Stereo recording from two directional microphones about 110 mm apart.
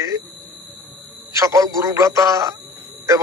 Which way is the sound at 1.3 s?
30° right (ahead or behind).